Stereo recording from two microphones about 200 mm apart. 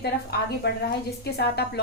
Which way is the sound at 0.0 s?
55° left (ahead or behind).